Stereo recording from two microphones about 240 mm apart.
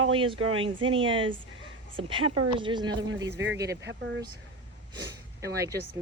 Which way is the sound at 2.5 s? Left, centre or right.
Centre.